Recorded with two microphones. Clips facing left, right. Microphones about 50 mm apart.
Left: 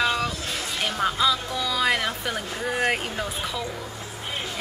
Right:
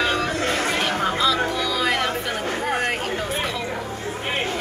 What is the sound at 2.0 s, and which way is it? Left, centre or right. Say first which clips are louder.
Chatter: right 4 dB; right.